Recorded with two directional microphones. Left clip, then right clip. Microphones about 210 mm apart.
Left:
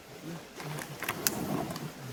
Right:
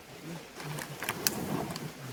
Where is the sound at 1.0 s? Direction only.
5° left (ahead or behind).